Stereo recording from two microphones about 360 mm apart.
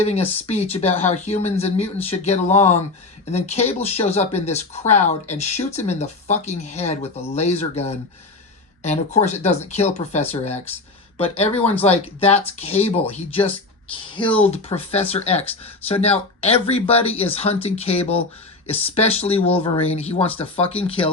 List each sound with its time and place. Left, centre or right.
0.4 s speech: centre
14.2 s speech: centre
14.4 s speech: centre